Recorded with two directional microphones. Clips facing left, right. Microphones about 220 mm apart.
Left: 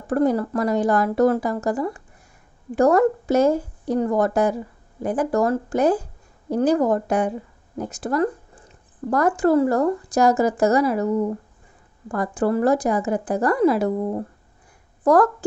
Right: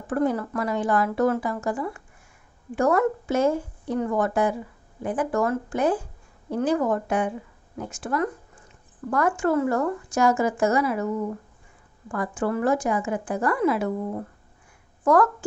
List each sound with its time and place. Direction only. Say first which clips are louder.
0.0 s a woman's voice: left 4 dB; 40° left (ahead or behind)